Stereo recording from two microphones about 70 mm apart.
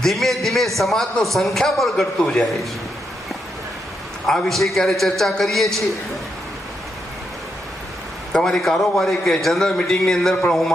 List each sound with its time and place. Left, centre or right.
0.0 s a man's voice: centre
4.3 s a man's voice: centre
8.3 s a man's voice: centre